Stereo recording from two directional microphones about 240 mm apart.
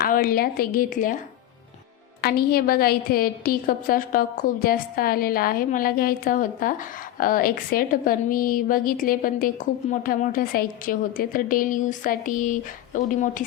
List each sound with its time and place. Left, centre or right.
0.0 s a woman's voice: left
2.2 s a woman's voice: left